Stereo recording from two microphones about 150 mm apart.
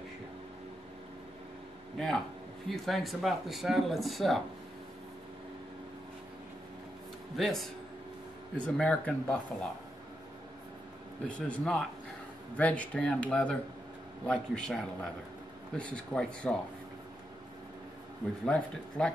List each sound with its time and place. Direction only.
2.0 s speech: 5° left (ahead or behind)
7.3 s speech: centre (ahead or behind)
8.6 s speech: 5° left (ahead or behind)
11.2 s speech: 10° left (ahead or behind)
18.4 s speech: 5° left (ahead or behind)